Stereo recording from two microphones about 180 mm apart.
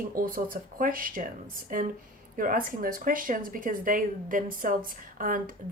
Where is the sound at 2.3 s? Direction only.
50° right (ahead or behind).